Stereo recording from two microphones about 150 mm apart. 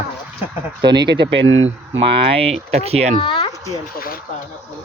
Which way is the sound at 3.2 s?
35° left (ahead or behind).